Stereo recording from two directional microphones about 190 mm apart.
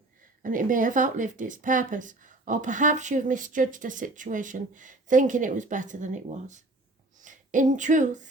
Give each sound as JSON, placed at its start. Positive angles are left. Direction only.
{"t": 0.4, "sound": "speech", "side_deg": -45}